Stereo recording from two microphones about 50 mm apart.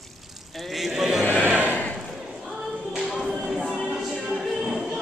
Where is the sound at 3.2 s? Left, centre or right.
Centre.